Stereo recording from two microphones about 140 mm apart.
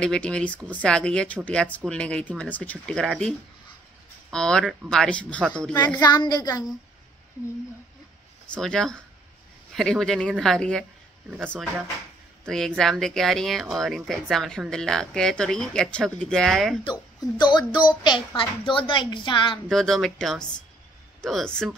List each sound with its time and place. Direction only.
0.0 s a woman's voice: 5° left (ahead or behind)
5.9 s a woman's voice: 30° left (ahead or behind)
8.5 s a woman's voice: 5° left (ahead or behind)
12.4 s a woman's voice: 5° left (ahead or behind)
16.8 s a woman's voice: 30° left (ahead or behind)
19.7 s a woman's voice: centre (ahead or behind)